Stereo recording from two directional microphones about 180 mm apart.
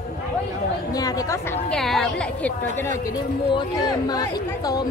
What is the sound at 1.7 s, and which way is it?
Speech, centre (ahead or behind).